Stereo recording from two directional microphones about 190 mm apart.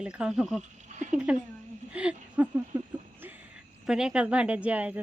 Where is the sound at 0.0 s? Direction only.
5° right (ahead or behind).